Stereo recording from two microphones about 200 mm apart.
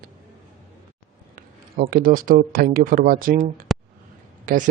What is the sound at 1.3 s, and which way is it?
Speech, 45° right (ahead or behind).